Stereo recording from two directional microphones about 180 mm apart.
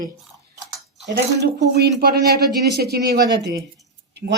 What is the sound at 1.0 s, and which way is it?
Speech, 70° right (ahead or behind).